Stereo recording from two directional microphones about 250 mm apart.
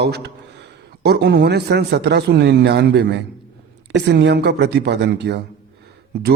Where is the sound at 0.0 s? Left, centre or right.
Right.